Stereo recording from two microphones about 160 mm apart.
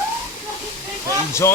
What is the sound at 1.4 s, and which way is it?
Speech, 20° left (ahead or behind).